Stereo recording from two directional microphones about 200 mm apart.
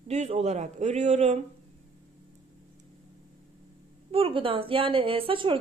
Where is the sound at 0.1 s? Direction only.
35° right (ahead or behind).